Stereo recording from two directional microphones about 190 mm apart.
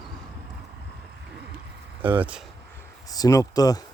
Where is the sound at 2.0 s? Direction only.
10° right (ahead or behind).